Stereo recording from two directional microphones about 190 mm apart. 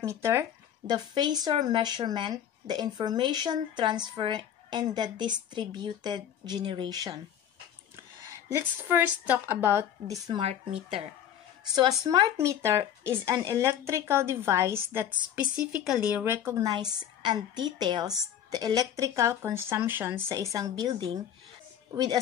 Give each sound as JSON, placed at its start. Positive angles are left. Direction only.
{"t": 0.0, "sound": "speech", "side_deg": -15}
{"t": 8.3, "sound": "a woman's voice", "side_deg": -15}
{"t": 10.2, "sound": "speech", "side_deg": -30}
{"t": 11.7, "sound": "a woman's voice", "side_deg": -20}